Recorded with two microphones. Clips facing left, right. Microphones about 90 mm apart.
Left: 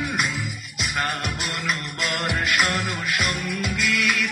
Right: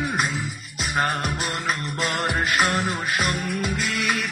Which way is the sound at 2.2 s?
30° right (ahead or behind).